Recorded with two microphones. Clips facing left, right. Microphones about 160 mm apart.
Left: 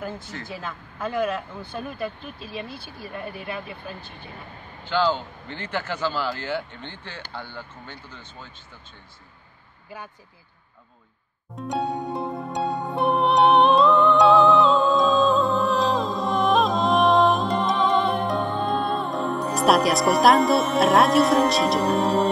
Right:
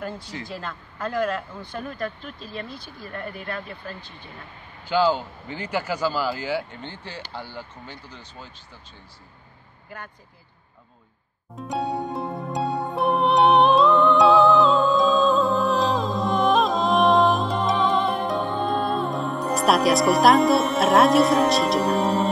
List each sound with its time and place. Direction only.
0.5 s speech: 5° left (ahead or behind)
4.8 s a man's voice: 10° right (ahead or behind)
7.9 s speech: 35° right (ahead or behind)
11.5 s music: centre (ahead or behind)